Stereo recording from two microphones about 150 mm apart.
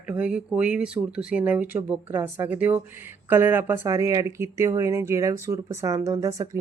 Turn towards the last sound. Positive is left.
turn(degrees=-20)  # may be behind; listen again after turning